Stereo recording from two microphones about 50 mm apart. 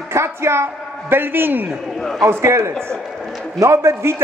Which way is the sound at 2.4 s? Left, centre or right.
Right.